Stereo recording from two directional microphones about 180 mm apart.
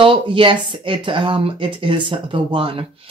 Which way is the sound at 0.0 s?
30° right (ahead or behind).